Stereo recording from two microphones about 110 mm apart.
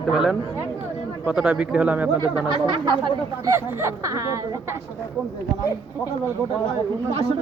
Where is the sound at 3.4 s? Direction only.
25° right (ahead or behind).